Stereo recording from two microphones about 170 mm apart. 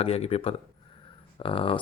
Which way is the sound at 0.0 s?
35° left (ahead or behind).